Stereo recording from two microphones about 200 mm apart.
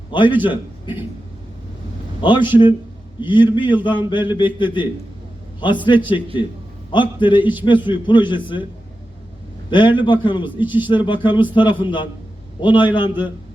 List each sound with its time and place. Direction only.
0.1 s a man's voice: 25° left (ahead or behind)
2.2 s speech: 25° left (ahead or behind)
9.6 s speech: 25° left (ahead or behind)